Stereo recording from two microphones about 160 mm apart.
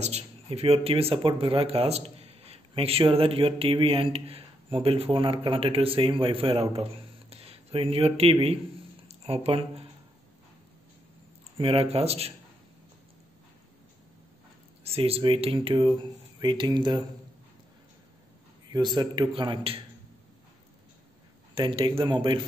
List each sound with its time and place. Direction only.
0.0 s speech: 40° right (ahead or behind)
11.5 s speech: 35° right (ahead or behind)
14.8 s speech: 40° right (ahead or behind)
18.7 s a man's voice: 25° right (ahead or behind)
21.5 s speech: 30° right (ahead or behind)